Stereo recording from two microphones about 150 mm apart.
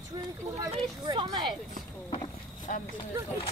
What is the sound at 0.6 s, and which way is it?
Speech, 25° right (ahead or behind).